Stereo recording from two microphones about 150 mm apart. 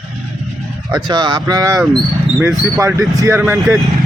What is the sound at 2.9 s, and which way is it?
Speech, 20° right (ahead or behind).